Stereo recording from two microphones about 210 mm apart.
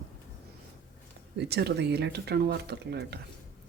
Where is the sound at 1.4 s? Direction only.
50° right (ahead or behind).